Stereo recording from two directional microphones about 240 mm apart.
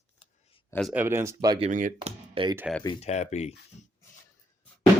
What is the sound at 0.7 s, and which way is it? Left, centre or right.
Speech, centre.